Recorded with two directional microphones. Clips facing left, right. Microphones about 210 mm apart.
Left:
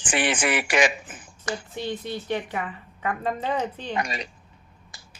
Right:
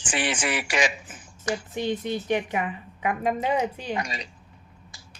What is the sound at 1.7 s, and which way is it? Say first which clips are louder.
A woman's voice: right 5 dB; 15° right (ahead or behind).